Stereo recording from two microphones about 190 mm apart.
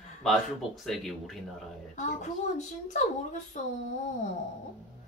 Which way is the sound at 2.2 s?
40° left (ahead or behind).